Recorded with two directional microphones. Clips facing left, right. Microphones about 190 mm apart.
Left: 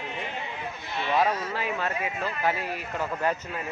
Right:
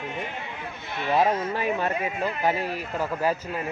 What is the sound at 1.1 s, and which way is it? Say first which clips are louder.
Speech: right 3 dB; 25° right (ahead or behind).